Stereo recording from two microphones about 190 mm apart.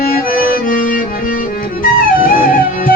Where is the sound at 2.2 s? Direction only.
45° left (ahead or behind).